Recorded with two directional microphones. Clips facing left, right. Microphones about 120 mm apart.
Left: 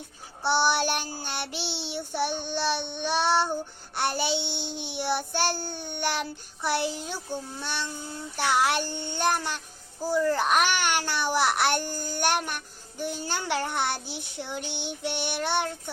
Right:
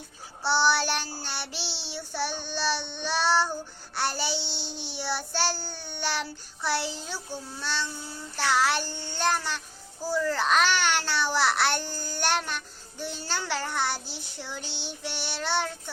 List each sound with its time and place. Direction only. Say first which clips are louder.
0.4 s a child's voice: even; 20° left (ahead or behind)
1.7 s child singing: left 4 dB; 20° left (ahead or behind)
4.4 s a child's voice: left 4 dB; 55° left (ahead or behind)
4.7 s child singing: left 4 dB; 20° left (ahead or behind)
6.1 s a child's voice: left 1 dB; 15° left (ahead or behind)
13.1 s child singing: left 2 dB; 15° left (ahead or behind)
15.0 s a child's voice: left 4 dB; 20° left (ahead or behind)